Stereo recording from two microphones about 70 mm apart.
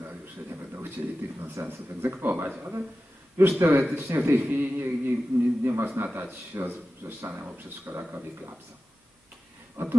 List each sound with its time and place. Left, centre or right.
0.0 s a man's voice: right
5.9 s a man's voice: right
6.1 s a man's voice: right
9.8 s speech: right